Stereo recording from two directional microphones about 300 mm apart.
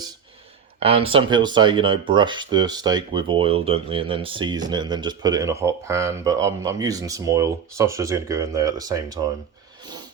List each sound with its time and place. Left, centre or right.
0.8 s speech: centre